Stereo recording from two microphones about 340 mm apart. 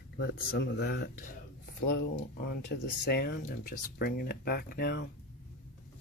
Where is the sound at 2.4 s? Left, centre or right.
Left.